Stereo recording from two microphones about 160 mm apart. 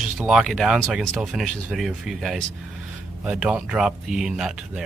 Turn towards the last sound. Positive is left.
turn(degrees=-5)  # may be behind; listen again after turning